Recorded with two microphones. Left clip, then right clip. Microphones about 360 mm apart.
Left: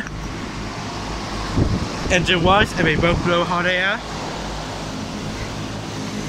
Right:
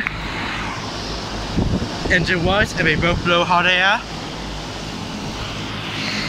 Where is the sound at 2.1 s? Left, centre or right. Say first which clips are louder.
Left 2 dB; centre.